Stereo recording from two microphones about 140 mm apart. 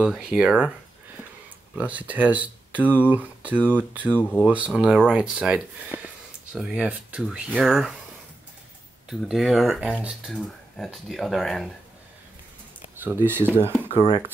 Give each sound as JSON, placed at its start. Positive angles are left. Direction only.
{"t": 0.0, "sound": "speech", "side_deg": -5}
{"t": 1.8, "sound": "speech", "side_deg": -10}
{"t": 9.3, "sound": "speech", "side_deg": 0}
{"t": 13.0, "sound": "speech", "side_deg": -15}